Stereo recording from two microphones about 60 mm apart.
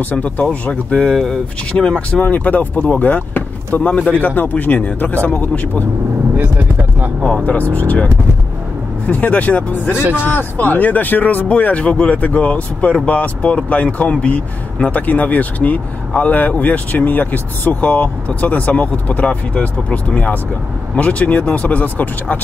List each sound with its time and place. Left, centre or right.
0.0 s speech: left
1.1 s speech: centre
1.7 s speech: centre
6.3 s vehicle: right
7.4 s speech: left
9.1 s speech: left